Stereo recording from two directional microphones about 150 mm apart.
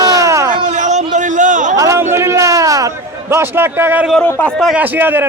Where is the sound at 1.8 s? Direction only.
20° right (ahead or behind).